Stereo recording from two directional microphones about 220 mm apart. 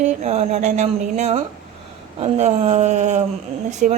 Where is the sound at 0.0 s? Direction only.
30° right (ahead or behind).